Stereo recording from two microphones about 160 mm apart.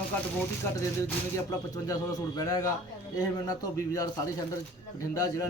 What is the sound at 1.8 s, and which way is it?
A man's voice, 20° left (ahead or behind).